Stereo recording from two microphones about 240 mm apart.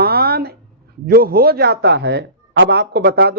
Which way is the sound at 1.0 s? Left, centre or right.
Right.